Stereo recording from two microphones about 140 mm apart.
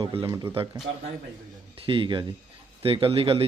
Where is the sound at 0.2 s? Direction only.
20° right (ahead or behind).